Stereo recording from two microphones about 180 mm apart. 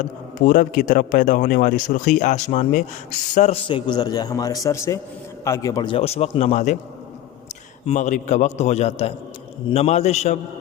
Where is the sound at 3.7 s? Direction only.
25° left (ahead or behind).